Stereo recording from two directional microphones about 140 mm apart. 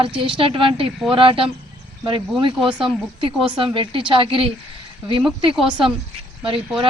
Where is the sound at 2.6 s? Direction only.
35° right (ahead or behind).